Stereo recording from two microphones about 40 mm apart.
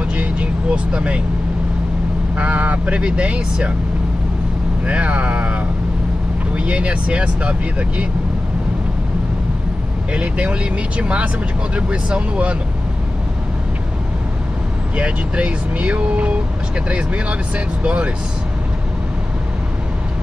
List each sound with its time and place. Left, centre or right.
0.0 s vehicle: right
2.3 s speech: right
4.8 s speech: right
10.1 s speech: right
15.0 s speech: right